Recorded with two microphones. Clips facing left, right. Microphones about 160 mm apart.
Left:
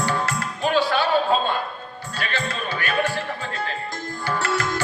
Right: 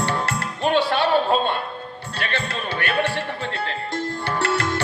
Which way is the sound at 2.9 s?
30° right (ahead or behind).